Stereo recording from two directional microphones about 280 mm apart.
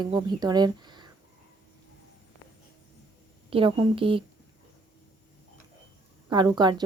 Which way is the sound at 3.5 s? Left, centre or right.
Centre.